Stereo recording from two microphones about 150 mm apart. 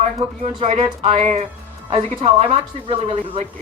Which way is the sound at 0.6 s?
45° right (ahead or behind).